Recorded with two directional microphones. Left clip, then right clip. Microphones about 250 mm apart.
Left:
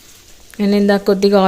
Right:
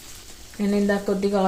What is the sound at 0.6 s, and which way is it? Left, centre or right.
Speech, left.